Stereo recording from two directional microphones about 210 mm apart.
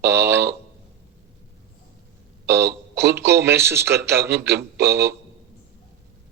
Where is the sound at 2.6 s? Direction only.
10° right (ahead or behind).